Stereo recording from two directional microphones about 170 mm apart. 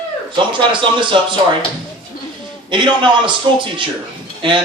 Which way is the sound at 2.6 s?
25° right (ahead or behind).